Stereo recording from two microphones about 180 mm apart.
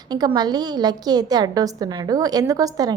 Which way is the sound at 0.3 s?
20° right (ahead or behind).